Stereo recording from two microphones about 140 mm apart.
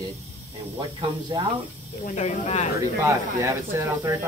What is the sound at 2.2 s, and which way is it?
Speech, 55° left (ahead or behind).